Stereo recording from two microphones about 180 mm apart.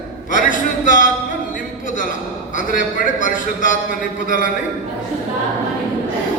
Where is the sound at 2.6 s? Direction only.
45° left (ahead or behind).